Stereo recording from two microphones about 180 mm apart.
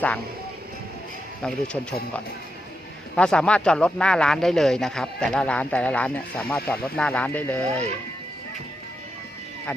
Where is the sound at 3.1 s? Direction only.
5° left (ahead or behind).